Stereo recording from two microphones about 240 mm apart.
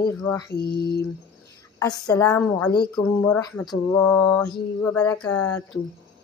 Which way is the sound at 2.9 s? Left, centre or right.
Centre.